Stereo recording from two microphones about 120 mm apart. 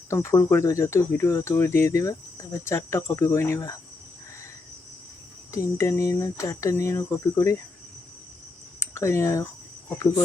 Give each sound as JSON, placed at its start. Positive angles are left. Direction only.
{"t": 0.1, "sound": "speech", "side_deg": 25}
{"t": 5.5, "sound": "speech", "side_deg": 25}
{"t": 8.8, "sound": "speech", "side_deg": 25}